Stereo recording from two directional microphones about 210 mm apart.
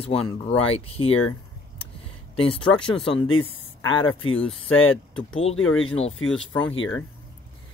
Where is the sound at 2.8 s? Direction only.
5° left (ahead or behind).